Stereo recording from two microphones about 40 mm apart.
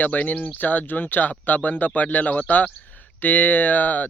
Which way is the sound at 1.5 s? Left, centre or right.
Left.